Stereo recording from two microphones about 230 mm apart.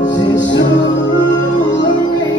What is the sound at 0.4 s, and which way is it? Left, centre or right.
Music, left.